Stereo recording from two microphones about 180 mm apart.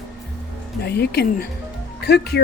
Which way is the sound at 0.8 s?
65° left (ahead or behind).